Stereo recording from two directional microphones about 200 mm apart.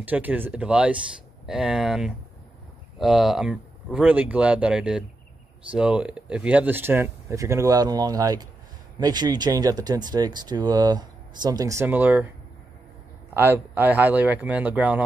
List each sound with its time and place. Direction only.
0.0 s speech: 10° right (ahead or behind)
13.3 s speech: 10° right (ahead or behind)